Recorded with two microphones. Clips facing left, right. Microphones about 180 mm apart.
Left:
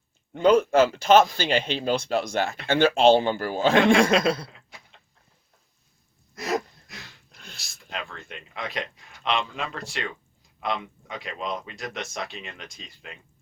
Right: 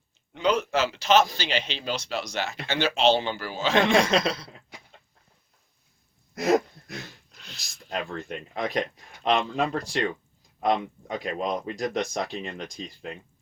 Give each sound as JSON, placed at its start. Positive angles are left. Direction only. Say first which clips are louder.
{"t": 0.3, "sound": "a man's voice", "louder": "left 6 dB", "side_deg": 50}
{"t": 6.3, "sound": "dog", "louder": "right 6 dB", "side_deg": -55}
{"t": 7.3, "sound": "a sound", "louder": "left 1 dB", "side_deg": 50}
{"t": 7.9, "sound": "speech", "louder": "right 5 dB", "side_deg": -40}
{"t": 11.1, "sound": "speech", "louder": "right 4 dB", "side_deg": -45}